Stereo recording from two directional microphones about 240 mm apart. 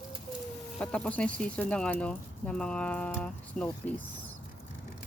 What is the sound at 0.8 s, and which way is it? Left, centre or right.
Speech, centre.